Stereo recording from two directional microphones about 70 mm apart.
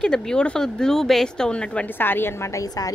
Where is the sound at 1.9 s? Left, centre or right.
Left.